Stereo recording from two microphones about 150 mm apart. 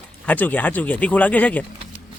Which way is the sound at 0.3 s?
10° left (ahead or behind).